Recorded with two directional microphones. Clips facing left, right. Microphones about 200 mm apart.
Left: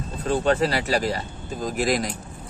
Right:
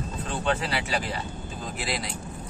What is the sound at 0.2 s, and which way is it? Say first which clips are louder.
Speech: left 8 dB; 40° left (ahead or behind).